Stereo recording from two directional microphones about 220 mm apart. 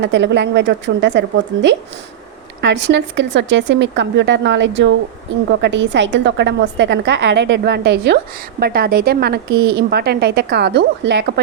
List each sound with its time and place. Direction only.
0.0 s a woman's voice: 55° right (ahead or behind)
2.6 s a woman's voice: 55° right (ahead or behind)